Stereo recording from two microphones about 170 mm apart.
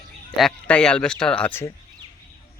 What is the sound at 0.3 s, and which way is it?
Speech, 5° left (ahead or behind).